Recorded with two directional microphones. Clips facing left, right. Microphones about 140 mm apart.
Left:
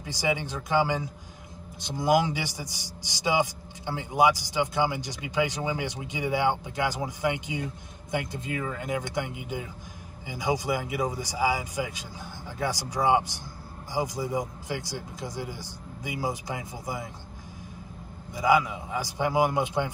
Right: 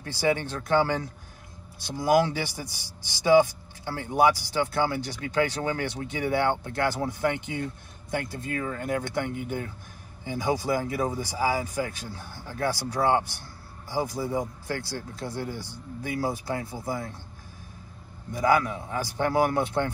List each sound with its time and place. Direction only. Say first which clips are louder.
0.0 s a man's voice: right 3 dB; 15° left (ahead or behind)
18.4 s a man's voice: even; 10° left (ahead or behind)